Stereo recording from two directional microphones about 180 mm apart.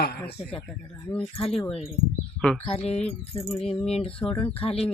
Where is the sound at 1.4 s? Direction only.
30° left (ahead or behind).